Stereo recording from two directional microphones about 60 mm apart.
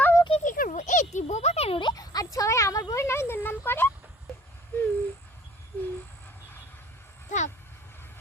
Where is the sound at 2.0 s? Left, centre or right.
Left.